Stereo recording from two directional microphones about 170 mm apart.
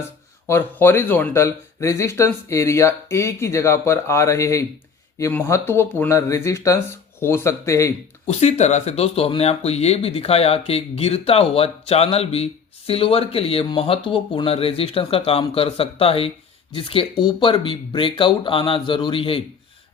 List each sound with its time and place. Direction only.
0.4 s speech: 15° left (ahead or behind)
8.3 s speech: 40° left (ahead or behind)